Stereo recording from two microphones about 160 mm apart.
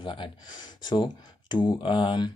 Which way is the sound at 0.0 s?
30° left (ahead or behind).